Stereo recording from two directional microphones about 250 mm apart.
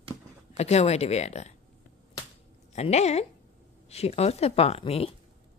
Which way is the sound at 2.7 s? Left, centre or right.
Left.